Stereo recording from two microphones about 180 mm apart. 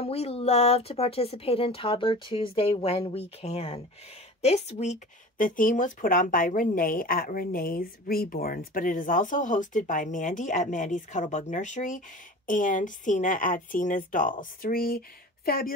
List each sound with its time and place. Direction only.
0.0 s speech: 35° left (ahead or behind); by 15.7 s 55° left (ahead or behind)